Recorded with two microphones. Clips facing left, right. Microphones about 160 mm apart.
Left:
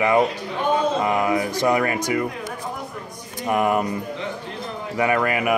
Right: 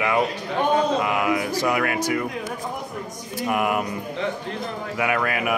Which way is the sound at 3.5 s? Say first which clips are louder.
Left 3 dB; 30° left (ahead or behind).